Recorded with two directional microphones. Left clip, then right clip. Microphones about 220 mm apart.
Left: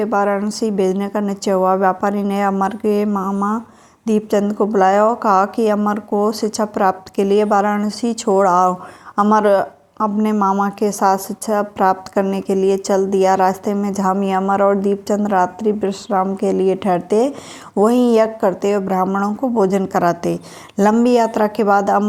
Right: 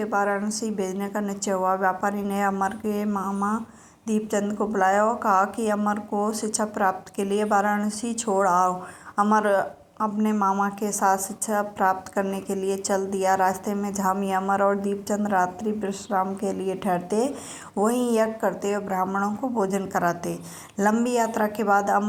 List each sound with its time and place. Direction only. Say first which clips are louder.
0.0 s a woman's voice: left 7 dB; 35° left (ahead or behind)